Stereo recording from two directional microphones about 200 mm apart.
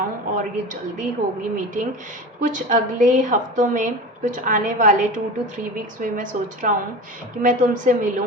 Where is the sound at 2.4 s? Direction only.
40° right (ahead or behind).